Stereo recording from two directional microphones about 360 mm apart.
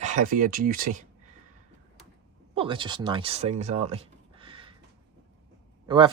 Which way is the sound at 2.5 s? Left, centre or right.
Centre.